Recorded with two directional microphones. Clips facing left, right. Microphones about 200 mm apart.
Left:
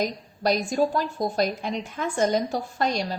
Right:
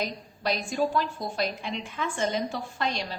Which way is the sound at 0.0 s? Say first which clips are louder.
Left 5 dB; 40° left (ahead or behind).